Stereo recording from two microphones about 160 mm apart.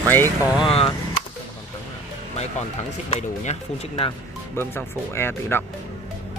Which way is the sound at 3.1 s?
35° left (ahead or behind).